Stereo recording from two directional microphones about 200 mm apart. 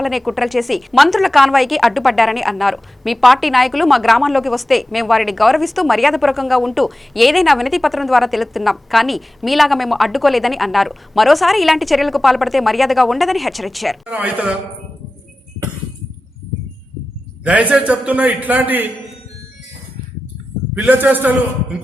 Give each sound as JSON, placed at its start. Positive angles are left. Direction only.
{"t": 0.0, "sound": "a woman's voice", "side_deg": 0}
{"t": 17.4, "sound": "a man's voice", "side_deg": -5}
{"t": 20.7, "sound": "a man's voice", "side_deg": -10}